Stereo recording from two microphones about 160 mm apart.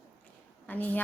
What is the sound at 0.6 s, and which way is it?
Speech, 10° left (ahead or behind).